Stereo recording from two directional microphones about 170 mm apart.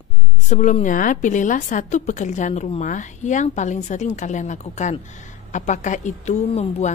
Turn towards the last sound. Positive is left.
turn(degrees=40)  # may be behind; listen again after turning